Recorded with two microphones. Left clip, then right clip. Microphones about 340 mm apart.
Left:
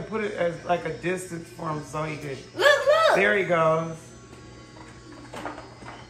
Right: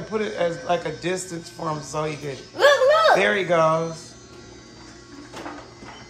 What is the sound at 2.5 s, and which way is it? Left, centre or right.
Music, right.